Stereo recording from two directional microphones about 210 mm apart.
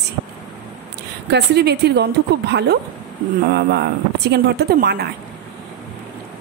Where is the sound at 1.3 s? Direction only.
50° right (ahead or behind).